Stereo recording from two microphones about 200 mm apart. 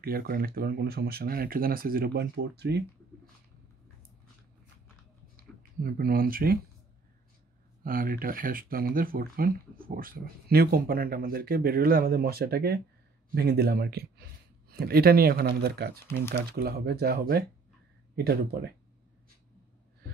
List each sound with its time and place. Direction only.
0.0 s speech: 50° right (ahead or behind)
5.6 s speech: 45° right (ahead or behind)
7.8 s speech: 45° right (ahead or behind)